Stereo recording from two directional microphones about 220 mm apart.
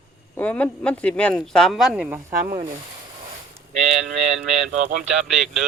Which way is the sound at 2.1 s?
15° right (ahead or behind).